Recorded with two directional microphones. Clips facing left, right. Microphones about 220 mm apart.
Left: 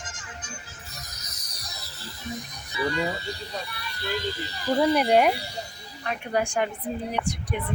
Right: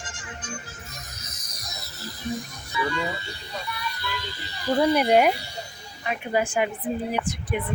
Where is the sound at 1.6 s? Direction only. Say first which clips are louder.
Right 3 dB; 30° left (ahead or behind).